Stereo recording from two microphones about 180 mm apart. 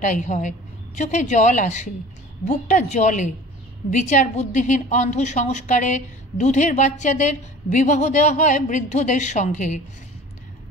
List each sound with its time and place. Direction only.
0.0 s a woman's voice: 45° left (ahead or behind)